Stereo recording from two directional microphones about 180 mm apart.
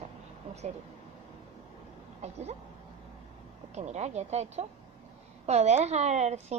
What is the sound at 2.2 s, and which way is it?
Speech, 35° right (ahead or behind).